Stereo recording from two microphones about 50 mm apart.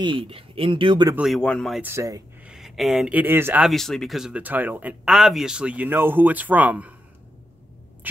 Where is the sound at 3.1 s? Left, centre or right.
Right.